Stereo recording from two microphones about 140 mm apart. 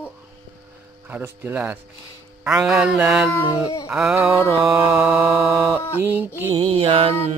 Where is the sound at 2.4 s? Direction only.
5° right (ahead or behind).